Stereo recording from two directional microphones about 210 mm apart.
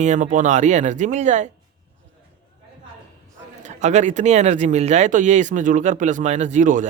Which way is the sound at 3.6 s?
35° right (ahead or behind).